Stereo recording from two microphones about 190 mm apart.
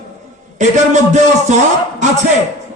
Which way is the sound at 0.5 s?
40° right (ahead or behind).